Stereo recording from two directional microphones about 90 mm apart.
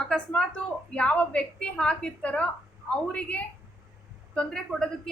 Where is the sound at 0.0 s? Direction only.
10° left (ahead or behind).